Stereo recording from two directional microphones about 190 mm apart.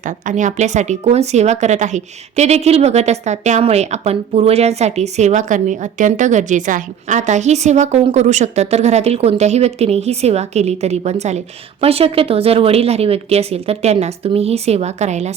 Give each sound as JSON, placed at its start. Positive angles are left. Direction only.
{"t": 0.3, "sound": "a woman's voice", "side_deg": -40}